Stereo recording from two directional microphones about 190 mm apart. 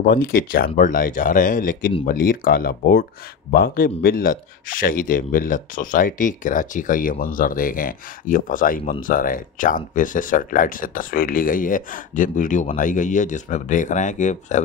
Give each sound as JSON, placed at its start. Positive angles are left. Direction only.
{"t": 0.0, "sound": "speech", "side_deg": 50}